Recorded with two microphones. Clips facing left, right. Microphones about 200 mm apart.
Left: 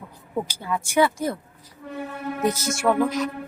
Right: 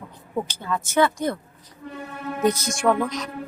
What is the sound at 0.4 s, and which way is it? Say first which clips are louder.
Speech: even; 10° left (ahead or behind).